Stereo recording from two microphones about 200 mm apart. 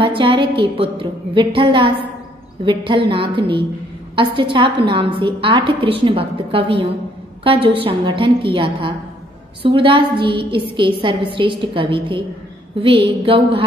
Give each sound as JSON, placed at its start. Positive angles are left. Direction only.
{"t": 0.0, "sound": "a woman's voice", "side_deg": -25}